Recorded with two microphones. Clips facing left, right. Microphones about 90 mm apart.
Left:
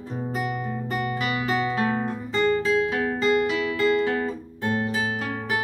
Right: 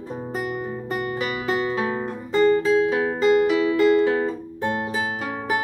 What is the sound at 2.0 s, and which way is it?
Music, 10° right (ahead or behind).